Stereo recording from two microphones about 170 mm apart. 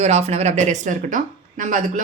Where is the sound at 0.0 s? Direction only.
40° right (ahead or behind).